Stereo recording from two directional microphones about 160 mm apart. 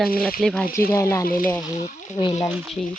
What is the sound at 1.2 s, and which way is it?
Speech, 60° left (ahead or behind).